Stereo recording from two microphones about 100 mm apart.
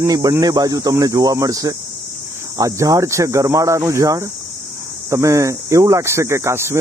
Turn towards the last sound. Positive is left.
turn(degrees=-25)  # may be behind; listen again after turning